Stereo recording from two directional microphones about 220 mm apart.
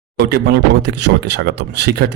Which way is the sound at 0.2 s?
50° right (ahead or behind).